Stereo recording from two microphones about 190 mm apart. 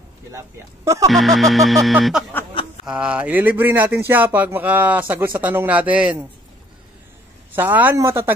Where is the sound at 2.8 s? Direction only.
5° right (ahead or behind).